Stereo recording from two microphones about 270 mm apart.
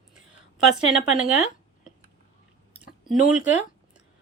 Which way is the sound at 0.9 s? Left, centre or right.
Centre.